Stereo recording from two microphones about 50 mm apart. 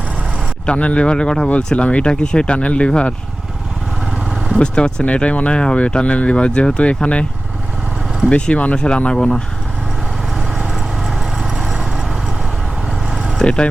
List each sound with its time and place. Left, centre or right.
0.6 s speech: left
4.6 s speech: centre
8.3 s speech: left
10.3 s vehicle: centre
13.4 s speech: centre